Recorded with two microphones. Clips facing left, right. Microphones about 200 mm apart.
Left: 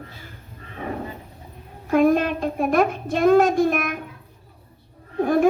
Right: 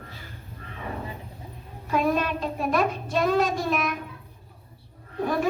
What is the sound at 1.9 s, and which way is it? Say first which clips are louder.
Child singing: left 7 dB; 50° left (ahead or behind).